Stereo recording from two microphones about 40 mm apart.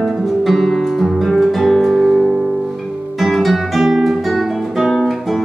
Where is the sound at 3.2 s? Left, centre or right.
Centre.